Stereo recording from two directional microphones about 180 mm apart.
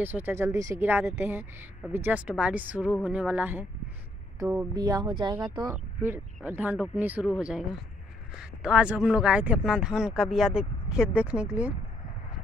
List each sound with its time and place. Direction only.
0.0 s speech: 10° right (ahead or behind)
5.9 s speech: 10° right (ahead or behind)